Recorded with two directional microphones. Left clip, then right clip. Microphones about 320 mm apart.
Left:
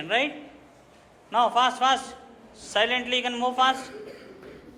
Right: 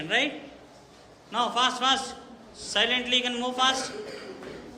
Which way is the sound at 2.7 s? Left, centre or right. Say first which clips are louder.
Even; centre.